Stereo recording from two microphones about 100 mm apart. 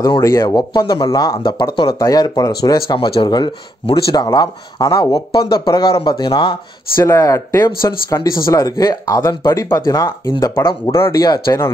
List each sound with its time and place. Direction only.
0.0 s speech: 35° left (ahead or behind)
0.6 s speech: 40° left (ahead or behind)
1.4 s speech: 50° left (ahead or behind)
2.0 s speech: 40° left (ahead or behind)
6.0 s speech: 50° left (ahead or behind)
7.0 s speech: 30° left (ahead or behind)